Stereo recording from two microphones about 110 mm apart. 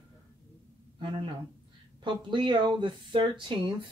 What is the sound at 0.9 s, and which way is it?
Speech, 45° right (ahead or behind).